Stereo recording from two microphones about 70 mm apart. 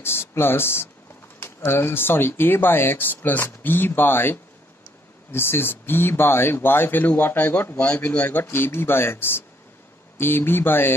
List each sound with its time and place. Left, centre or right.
0.0 s speech: left